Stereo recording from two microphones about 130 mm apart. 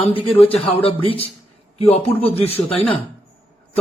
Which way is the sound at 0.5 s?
45° left (ahead or behind).